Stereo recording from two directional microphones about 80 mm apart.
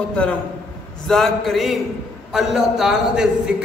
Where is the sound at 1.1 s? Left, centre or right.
Centre.